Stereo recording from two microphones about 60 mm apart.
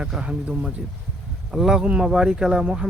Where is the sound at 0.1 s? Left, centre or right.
Centre.